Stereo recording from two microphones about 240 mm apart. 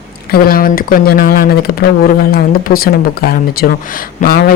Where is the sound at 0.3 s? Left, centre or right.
Left.